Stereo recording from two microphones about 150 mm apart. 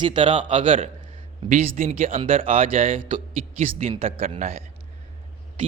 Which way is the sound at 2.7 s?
65° right (ahead or behind).